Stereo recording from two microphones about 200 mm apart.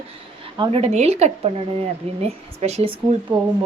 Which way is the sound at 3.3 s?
15° right (ahead or behind).